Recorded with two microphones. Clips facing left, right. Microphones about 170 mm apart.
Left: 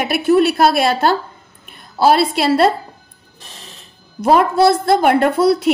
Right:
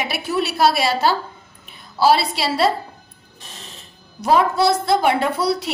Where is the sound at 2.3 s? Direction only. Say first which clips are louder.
Left 6 dB; 50° left (ahead or behind).